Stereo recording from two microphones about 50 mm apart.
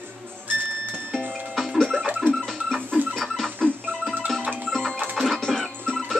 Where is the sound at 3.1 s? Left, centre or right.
Centre.